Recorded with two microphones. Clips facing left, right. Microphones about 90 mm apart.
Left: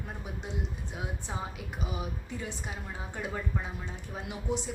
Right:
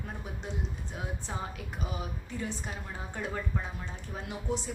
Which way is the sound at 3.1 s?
10° left (ahead or behind).